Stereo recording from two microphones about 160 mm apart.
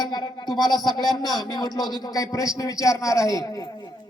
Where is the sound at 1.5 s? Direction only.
25° left (ahead or behind).